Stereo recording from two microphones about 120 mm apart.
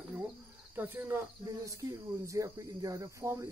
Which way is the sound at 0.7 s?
15° right (ahead or behind).